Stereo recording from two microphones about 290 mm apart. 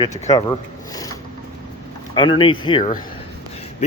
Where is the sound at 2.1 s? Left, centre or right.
Centre.